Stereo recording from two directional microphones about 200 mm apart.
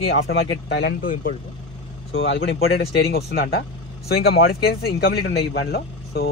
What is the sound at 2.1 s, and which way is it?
Speech, 70° left (ahead or behind).